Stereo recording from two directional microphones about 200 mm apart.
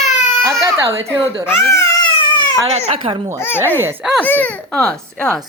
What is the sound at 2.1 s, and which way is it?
Baby cry, 25° left (ahead or behind).